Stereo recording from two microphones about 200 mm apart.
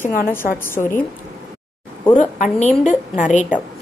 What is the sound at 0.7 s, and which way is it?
Speech, 10° left (ahead or behind).